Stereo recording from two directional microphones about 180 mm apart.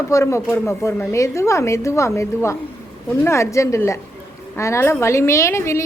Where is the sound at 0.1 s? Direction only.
15° left (ahead or behind).